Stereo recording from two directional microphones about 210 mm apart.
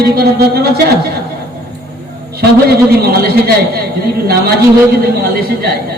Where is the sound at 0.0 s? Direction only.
45° right (ahead or behind).